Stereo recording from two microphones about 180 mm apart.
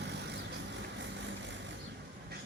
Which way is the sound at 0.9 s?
80° right.